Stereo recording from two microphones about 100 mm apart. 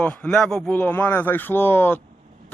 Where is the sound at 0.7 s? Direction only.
20° left (ahead or behind).